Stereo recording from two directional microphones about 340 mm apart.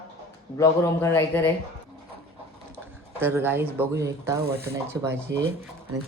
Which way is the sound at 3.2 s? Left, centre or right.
Centre.